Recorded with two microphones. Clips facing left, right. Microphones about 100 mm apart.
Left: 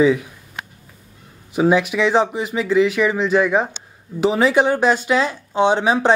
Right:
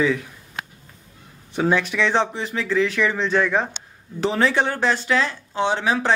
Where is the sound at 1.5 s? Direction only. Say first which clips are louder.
Left 5 dB; 10° left (ahead or behind).